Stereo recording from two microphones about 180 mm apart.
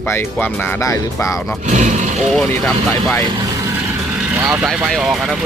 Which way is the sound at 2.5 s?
10° left (ahead or behind).